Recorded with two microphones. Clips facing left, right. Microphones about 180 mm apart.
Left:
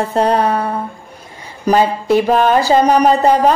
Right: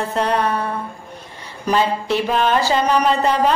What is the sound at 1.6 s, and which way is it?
Speech, 45° left (ahead or behind).